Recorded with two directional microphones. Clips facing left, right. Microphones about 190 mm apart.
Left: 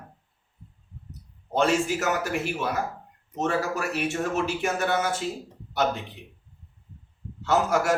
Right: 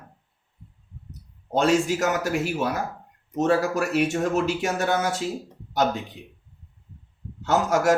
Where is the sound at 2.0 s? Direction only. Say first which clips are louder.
Right 3 dB; 40° right (ahead or behind).